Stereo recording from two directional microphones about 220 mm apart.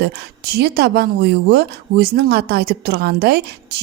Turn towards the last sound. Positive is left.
turn(degrees=-45)  # may be behind; listen again after turning